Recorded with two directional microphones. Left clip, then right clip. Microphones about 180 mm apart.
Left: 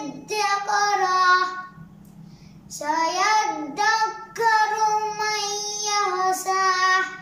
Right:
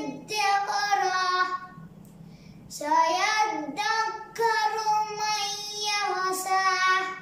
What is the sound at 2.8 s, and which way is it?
Child singing, 20° right (ahead or behind).